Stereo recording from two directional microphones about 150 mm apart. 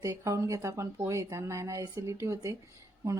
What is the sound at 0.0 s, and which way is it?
Speech, 20° right (ahead or behind).